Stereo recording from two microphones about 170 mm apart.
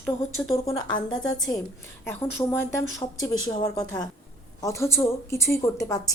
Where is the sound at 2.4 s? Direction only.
20° left (ahead or behind).